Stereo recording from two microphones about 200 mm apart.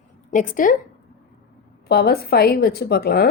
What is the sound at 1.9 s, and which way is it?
A woman's voice, 50° left (ahead or behind).